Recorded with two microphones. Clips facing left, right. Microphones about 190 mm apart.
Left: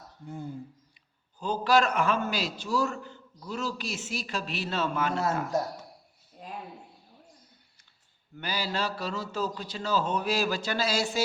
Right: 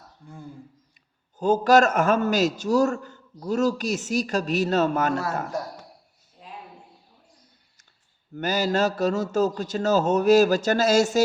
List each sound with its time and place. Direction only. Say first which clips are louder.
1.4 s a man's voice: right 7 dB; 45° right (ahead or behind)
6.4 s a sound: left 2 dB; 45° left (ahead or behind)
8.4 s a man's voice: right 9 dB; 45° right (ahead or behind)